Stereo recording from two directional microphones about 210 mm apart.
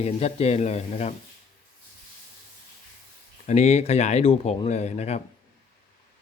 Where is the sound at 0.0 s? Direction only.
30° left (ahead or behind).